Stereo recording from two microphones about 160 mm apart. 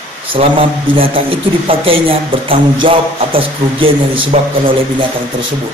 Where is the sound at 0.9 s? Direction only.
35° right (ahead or behind).